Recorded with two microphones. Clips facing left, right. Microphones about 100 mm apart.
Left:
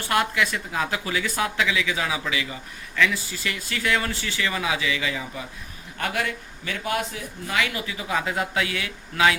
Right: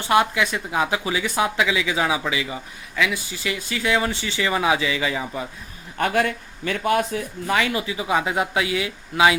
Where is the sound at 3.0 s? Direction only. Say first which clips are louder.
Even; 10° right (ahead or behind); by 5.5 s 30° right (ahead or behind).